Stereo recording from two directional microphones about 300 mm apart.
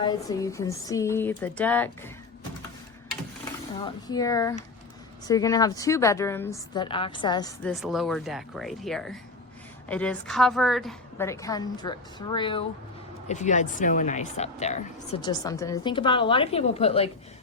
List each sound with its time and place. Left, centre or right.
0.0 s a woman's voice: centre
3.8 s a woman's voice: centre
7.7 s a woman's voice: centre